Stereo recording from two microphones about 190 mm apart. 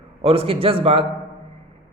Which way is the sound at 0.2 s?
30° right (ahead or behind).